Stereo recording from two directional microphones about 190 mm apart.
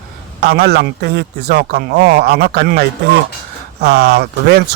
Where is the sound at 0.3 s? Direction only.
60° right (ahead or behind).